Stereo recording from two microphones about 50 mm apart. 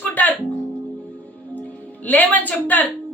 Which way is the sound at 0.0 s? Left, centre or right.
Left.